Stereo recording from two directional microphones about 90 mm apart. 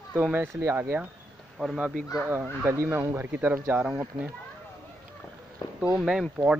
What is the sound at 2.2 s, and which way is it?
Speech, 25° right (ahead or behind).